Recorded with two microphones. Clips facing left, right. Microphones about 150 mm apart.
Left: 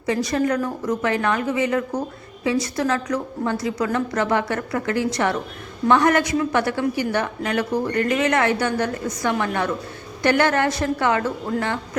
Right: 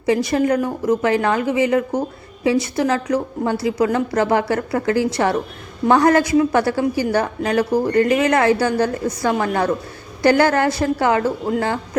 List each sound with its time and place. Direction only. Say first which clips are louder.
0.0 s a woman's voice: right 4 dB; 25° right (ahead or behind)